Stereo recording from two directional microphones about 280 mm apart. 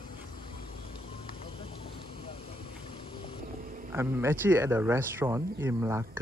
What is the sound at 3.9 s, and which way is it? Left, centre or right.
Speech, centre.